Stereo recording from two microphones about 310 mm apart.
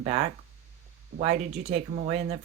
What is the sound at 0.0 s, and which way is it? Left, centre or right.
Speech, right.